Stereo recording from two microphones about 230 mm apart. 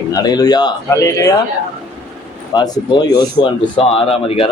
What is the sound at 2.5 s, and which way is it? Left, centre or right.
Speech, centre.